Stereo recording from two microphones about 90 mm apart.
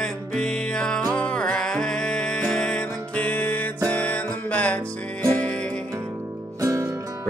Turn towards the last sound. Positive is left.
turn(degrees=-35)  # may be behind; listen again after turning